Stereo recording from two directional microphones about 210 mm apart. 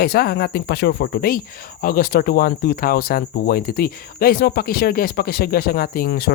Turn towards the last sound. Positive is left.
turn(degrees=50)  # may be behind; listen again after turning